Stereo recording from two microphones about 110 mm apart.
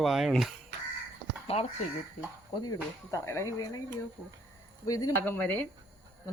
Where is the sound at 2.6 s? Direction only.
30° left (ahead or behind).